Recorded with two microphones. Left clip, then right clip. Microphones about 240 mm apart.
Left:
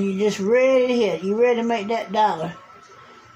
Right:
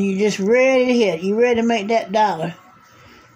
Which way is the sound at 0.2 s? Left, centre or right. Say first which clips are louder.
Right 2 dB; right.